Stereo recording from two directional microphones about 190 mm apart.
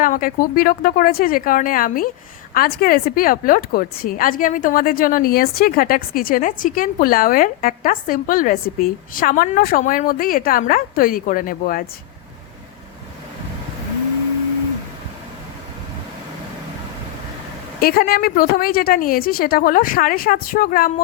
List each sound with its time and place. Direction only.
0.0 s a woman's voice: 45° left (ahead or behind)
17.7 s a woman's voice: 50° left (ahead or behind)